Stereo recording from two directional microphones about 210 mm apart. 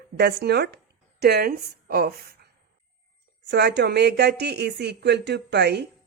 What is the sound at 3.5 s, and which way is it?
Speech, 50° right (ahead or behind).